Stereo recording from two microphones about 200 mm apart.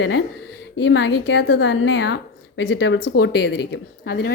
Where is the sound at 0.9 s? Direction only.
65° left (ahead or behind).